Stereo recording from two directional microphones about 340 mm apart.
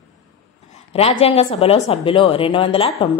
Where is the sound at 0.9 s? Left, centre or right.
Centre.